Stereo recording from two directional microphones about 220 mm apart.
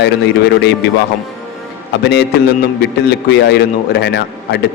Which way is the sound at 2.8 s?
50° left (ahead or behind).